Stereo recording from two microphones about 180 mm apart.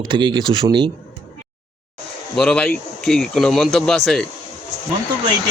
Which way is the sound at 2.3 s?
5° left (ahead or behind).